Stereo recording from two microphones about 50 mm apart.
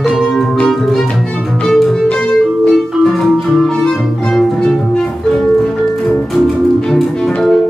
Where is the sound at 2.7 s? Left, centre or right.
Centre.